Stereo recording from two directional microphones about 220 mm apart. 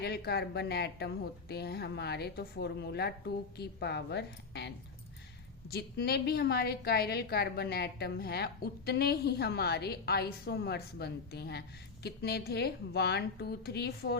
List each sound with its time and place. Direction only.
0.0 s a woman's voice: 50° left (ahead or behind)
5.7 s a woman's voice: 45° left (ahead or behind)